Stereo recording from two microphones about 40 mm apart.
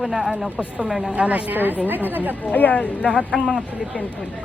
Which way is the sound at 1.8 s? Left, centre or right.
Right.